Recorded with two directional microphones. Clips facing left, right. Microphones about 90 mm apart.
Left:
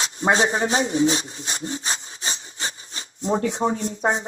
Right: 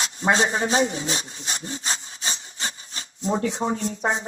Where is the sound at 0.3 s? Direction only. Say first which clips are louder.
Left 1 dB; 30° left (ahead or behind).